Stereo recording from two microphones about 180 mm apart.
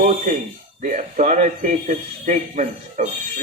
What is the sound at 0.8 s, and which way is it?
Speech, 45° right (ahead or behind).